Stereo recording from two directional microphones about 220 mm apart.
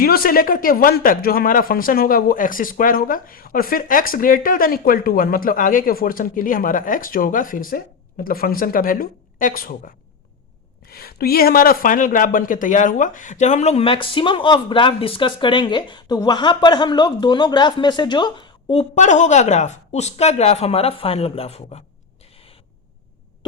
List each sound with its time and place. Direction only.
0.0 s speech: 40° left (ahead or behind); by 21.8 s 25° left (ahead or behind)